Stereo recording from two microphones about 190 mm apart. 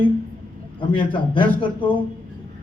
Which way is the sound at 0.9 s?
25° left (ahead or behind).